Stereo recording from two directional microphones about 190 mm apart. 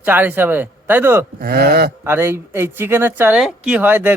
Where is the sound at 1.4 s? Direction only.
55° right (ahead or behind).